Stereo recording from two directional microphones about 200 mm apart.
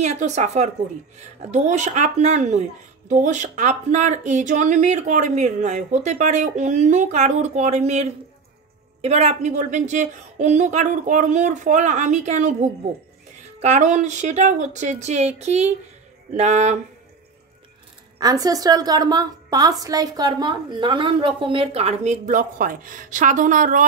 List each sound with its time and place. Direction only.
0.0 s speech: 35° right (ahead or behind)
18.2 s a woman's voice: 20° right (ahead or behind); by 23.8 s 40° right (ahead or behind)